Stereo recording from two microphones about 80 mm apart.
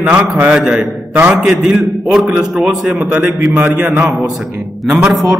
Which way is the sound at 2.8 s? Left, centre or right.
Centre.